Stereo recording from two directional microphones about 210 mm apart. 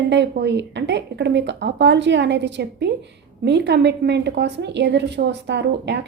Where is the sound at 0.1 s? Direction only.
55° right (ahead or behind).